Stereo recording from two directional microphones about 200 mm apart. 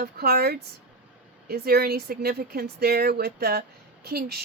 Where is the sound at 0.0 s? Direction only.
50° right (ahead or behind).